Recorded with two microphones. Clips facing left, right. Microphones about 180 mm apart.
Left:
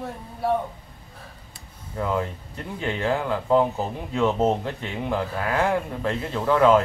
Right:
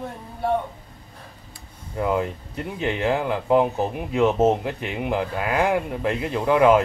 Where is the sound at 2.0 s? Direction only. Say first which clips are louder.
Right 3 dB; 15° right (ahead or behind).